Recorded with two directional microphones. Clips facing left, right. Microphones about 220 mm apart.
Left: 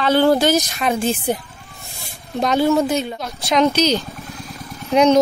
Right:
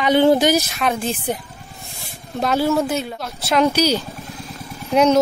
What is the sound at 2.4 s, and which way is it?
Speech, 5° right (ahead or behind).